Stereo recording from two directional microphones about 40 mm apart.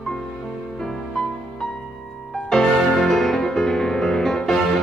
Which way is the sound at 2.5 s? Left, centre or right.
Centre.